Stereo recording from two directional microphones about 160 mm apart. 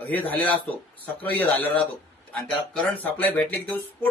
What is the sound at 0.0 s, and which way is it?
A man's voice, 10° left (ahead or behind).